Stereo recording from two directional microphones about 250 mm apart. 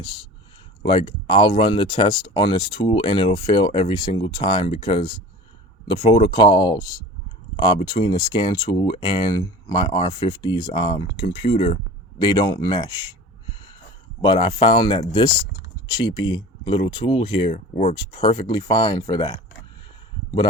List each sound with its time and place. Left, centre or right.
0.8 s speech: centre
14.2 s speech: centre